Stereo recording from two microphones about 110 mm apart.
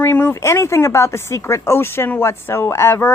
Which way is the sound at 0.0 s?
20° left (ahead or behind).